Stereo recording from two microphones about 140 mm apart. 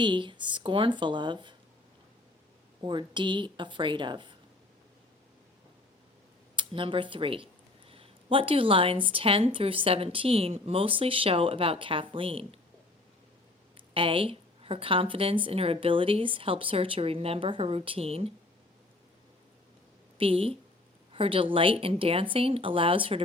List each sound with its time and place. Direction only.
0.0 s speech: 35° right (ahead or behind)
2.8 s speech: 35° right (ahead or behind)
6.6 s speech: 40° right (ahead or behind)
13.7 s speech: 40° right (ahead or behind)
20.1 s speech: 40° right (ahead or behind)